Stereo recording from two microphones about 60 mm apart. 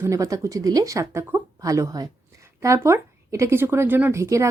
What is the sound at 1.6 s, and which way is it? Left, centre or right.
Speech, right.